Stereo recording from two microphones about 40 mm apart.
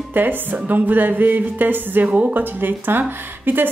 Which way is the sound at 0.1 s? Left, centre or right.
Right.